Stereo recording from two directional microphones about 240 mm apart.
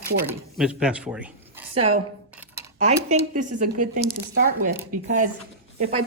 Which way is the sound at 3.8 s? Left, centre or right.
Right.